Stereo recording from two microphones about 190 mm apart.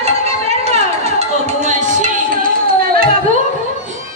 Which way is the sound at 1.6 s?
40° right (ahead or behind).